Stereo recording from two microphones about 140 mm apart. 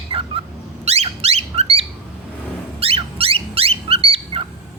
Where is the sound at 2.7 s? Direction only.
45° right (ahead or behind).